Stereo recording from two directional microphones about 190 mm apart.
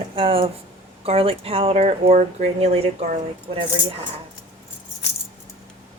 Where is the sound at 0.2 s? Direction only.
30° right (ahead or behind).